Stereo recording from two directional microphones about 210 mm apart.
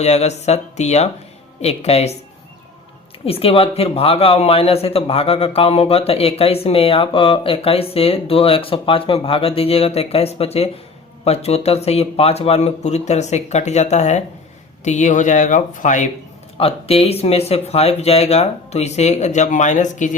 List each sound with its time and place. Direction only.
0.0 s a man's voice: 30° left (ahead or behind)
3.2 s a man's voice: 25° left (ahead or behind)